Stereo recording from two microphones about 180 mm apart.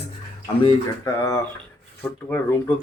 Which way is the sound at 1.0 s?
15° left (ahead or behind).